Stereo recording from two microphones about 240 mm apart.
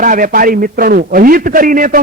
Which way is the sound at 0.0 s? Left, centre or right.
Right.